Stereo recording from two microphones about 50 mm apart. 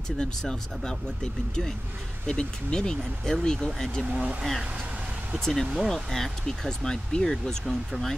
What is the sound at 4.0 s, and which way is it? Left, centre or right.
Speech, right.